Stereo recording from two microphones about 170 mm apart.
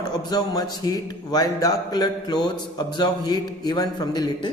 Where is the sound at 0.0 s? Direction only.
20° left (ahead or behind).